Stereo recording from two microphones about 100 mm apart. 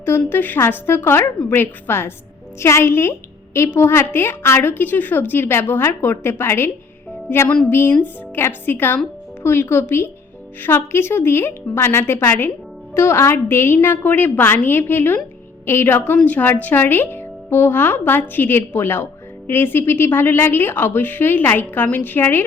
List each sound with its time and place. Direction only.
0.3 s a woman's voice: 20° left (ahead or behind)